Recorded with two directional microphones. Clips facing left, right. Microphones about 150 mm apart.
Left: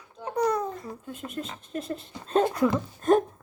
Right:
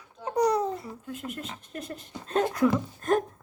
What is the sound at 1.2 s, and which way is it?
Speech, 30° left (ahead or behind).